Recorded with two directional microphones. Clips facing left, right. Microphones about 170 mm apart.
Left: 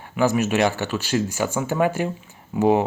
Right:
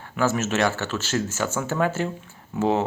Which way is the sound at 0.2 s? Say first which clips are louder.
Left 3 dB; 15° left (ahead or behind).